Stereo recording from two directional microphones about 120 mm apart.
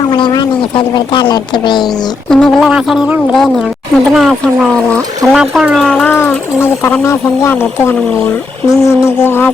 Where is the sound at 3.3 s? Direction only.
5° left (ahead or behind).